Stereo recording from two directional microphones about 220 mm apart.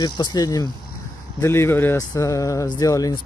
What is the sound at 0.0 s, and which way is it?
Speech, 20° left (ahead or behind).